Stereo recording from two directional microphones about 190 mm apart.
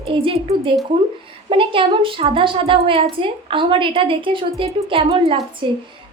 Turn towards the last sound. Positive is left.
turn(degrees=-25)  # may be behind; listen again after turning